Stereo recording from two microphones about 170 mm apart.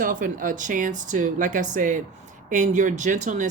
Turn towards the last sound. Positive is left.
turn(degrees=-45)  # may be behind; listen again after turning